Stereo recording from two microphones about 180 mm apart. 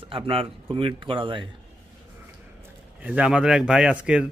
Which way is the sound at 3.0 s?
5° right (ahead or behind).